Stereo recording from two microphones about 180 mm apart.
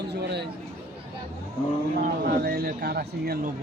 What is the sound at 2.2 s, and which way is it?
Speech, 65° right (ahead or behind).